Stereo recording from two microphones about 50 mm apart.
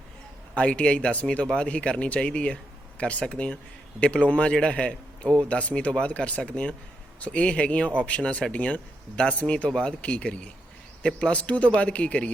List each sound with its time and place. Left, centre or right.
0.5 s speech: left